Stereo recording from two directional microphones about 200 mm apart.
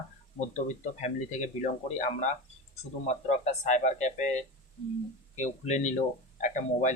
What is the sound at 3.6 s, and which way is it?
Speech, 35° left (ahead or behind).